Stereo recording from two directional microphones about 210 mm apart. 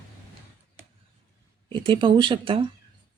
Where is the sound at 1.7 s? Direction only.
20° right (ahead or behind).